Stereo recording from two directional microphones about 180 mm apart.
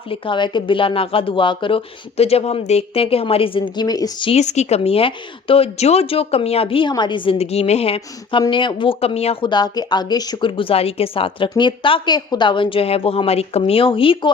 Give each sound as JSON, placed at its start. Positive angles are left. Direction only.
{"t": 0.1, "sound": "speech", "side_deg": 25}
{"t": 4.3, "sound": "speech", "side_deg": 40}